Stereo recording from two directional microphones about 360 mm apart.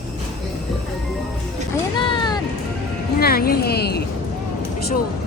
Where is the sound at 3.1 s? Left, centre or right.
Left.